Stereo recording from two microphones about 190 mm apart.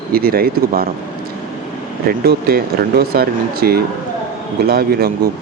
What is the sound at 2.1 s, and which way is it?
Speech, 55° right (ahead or behind).